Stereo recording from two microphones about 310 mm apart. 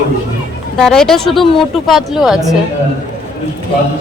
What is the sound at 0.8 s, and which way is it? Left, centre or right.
Speech, centre.